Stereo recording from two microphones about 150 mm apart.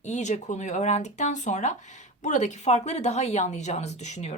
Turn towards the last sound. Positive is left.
turn(degrees=50)  # may be behind; listen again after turning